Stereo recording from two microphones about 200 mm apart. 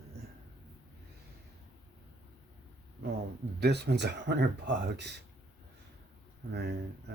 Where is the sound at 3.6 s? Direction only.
55° right (ahead or behind).